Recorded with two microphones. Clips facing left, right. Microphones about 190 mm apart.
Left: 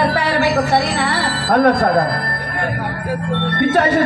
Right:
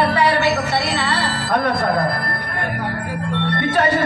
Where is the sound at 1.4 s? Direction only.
65° left (ahead or behind).